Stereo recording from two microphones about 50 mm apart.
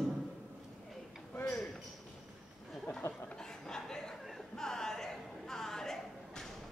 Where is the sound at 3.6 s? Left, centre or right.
Centre.